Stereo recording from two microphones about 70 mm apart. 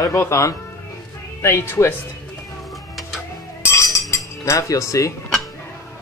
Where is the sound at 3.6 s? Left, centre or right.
Left.